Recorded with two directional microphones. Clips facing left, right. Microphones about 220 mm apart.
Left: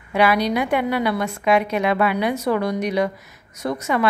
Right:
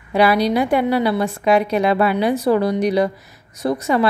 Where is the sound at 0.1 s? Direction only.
35° right (ahead or behind).